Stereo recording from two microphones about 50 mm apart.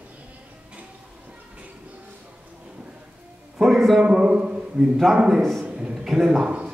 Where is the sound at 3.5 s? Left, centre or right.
Centre.